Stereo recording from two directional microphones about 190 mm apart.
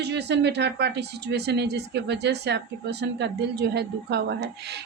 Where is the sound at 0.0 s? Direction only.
65° right (ahead or behind).